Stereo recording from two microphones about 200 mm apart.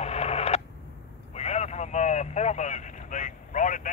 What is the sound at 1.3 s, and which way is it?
Vehicle, 35° left (ahead or behind).